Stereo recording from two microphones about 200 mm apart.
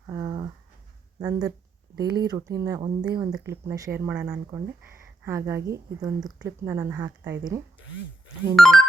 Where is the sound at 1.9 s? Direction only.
20° right (ahead or behind).